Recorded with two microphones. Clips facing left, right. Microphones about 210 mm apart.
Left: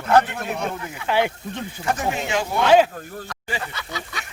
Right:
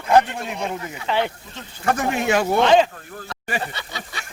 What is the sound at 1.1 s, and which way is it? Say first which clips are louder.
Speech: left 1 dB; 10° left (ahead or behind).